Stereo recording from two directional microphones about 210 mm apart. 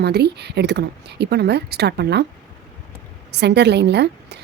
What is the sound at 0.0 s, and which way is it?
Speech, 50° right (ahead or behind).